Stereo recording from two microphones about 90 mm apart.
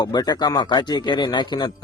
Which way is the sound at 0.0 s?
50° left (ahead or behind).